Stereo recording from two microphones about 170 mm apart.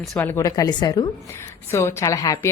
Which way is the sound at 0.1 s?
10° left (ahead or behind).